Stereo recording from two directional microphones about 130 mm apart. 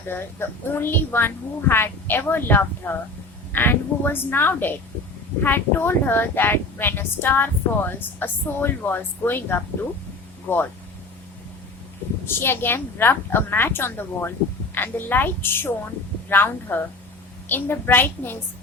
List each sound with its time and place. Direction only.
0.1 s speech: 15° left (ahead or behind)
12.2 s speech: 15° left (ahead or behind)